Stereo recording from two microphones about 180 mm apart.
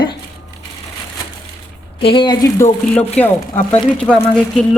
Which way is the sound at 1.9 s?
30° left (ahead or behind).